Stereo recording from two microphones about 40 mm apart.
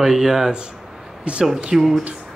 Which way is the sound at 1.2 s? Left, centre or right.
Right.